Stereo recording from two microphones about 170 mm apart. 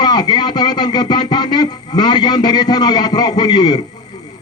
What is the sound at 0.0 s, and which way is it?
Speech, 25° left (ahead or behind).